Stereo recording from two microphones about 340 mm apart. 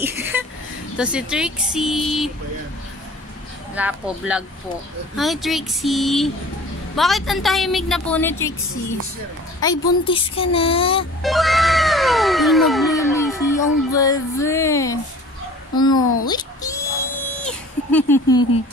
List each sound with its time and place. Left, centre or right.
0.0 s a sound: centre
0.9 s a woman's voice: centre
3.7 s a woman's voice: centre
9.6 s speech: centre
11.2 s cat: centre
15.7 s a woman's voice: centre
16.3 s a sound: centre